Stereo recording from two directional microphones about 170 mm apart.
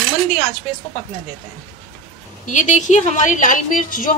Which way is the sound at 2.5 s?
45° left (ahead or behind).